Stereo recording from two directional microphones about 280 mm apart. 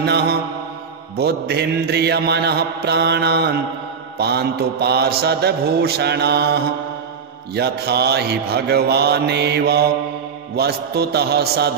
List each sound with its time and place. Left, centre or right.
0.0 s mantra: right